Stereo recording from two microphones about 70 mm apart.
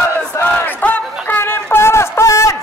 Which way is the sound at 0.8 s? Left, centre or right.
Left.